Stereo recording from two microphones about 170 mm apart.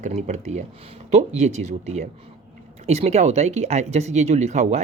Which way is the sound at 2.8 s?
40° right (ahead or behind).